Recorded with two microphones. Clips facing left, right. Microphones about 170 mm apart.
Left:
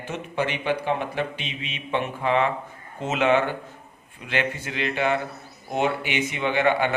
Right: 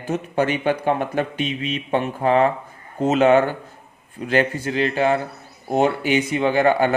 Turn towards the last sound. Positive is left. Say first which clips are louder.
# right 5 dB
turn(degrees=-40)  # may be behind; listen again after turning